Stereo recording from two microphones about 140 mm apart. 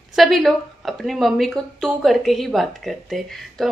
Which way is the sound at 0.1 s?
Centre (ahead or behind).